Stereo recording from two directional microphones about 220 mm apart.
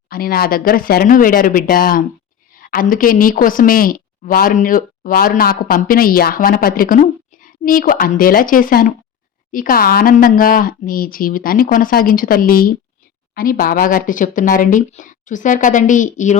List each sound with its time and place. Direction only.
0.1 s a woman's voice: 40° left (ahead or behind)